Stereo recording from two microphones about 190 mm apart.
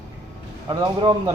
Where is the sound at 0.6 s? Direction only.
20° right (ahead or behind).